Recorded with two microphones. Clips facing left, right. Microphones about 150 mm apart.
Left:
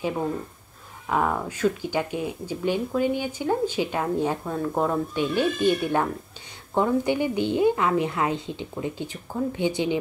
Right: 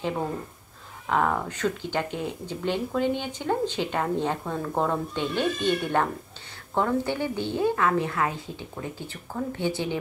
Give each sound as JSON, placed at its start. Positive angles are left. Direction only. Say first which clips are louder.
{"t": 1.0, "sound": "speech", "louder": "even", "side_deg": 10}